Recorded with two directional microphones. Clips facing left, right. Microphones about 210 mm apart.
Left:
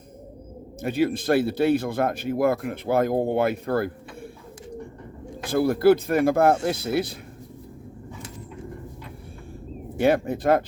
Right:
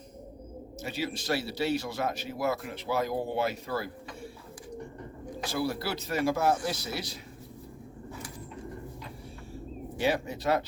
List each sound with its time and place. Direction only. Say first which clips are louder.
0.8 s speech: left 11 dB; 55° left (ahead or behind)
5.4 s speech: left 11 dB; 50° left (ahead or behind)
10.0 s speech: left 8 dB; 55° left (ahead or behind)